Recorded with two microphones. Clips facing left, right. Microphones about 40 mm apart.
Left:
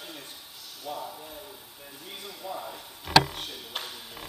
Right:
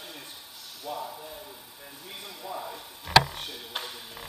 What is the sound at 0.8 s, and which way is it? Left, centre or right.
Speech, centre.